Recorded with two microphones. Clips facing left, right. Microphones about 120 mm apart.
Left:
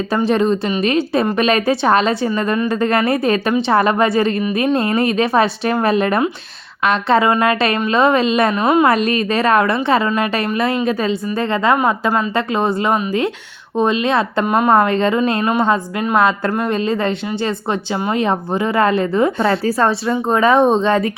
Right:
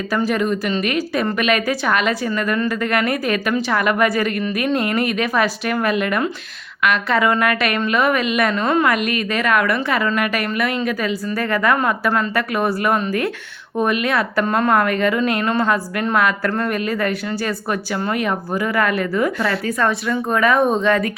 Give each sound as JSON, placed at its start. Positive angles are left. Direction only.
{"t": 0.3, "sound": "a woman's voice", "side_deg": 30}
{"t": 8.6, "sound": "a woman's voice", "side_deg": 15}
{"t": 8.9, "sound": "a woman's voice", "side_deg": 30}
{"t": 14.4, "sound": "a woman's voice", "side_deg": 15}
{"t": 14.7, "sound": "a woman's voice", "side_deg": 25}